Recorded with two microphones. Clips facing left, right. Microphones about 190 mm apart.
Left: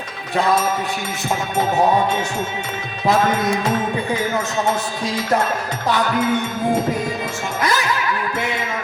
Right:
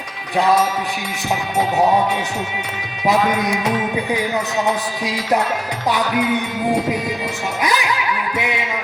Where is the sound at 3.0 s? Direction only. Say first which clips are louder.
Even; 15° right (ahead or behind).